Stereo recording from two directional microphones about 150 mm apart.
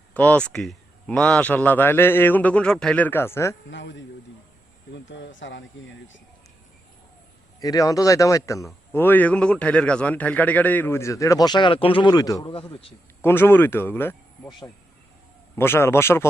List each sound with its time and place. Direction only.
0.1 s a man's voice: 10° left (ahead or behind)
7.6 s speech: 25° left (ahead or behind)
13.2 s a man's voice: 15° left (ahead or behind)
15.5 s a man's voice: 15° left (ahead or behind)